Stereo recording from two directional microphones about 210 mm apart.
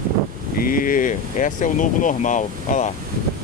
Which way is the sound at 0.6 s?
40° left (ahead or behind).